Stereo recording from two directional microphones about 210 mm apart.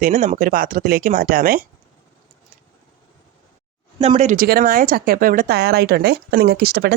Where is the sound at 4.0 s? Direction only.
30° right (ahead or behind).